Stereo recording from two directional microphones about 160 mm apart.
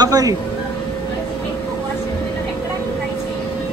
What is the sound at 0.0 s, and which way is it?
Speech, 20° right (ahead or behind).